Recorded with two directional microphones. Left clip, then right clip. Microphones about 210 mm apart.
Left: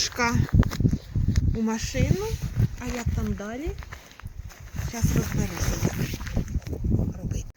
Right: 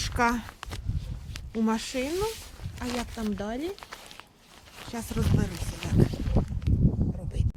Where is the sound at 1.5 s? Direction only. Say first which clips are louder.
Right 1 dB; 5° right (ahead or behind).